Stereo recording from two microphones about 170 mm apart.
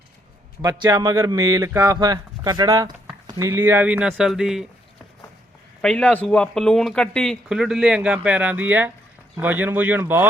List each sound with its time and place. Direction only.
0.6 s speech: 25° right (ahead or behind); by 4.6 s centre (ahead or behind)
5.8 s speech: 5° left (ahead or behind); by 10.2 s 10° right (ahead or behind)